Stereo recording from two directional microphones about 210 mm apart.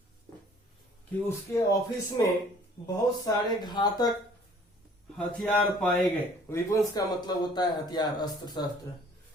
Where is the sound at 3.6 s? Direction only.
20° left (ahead or behind).